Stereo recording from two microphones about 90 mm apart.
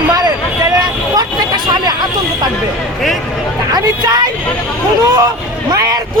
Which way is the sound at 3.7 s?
50° right (ahead or behind).